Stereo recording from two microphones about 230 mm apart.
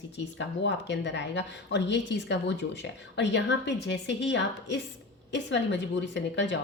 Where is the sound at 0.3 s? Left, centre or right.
Left.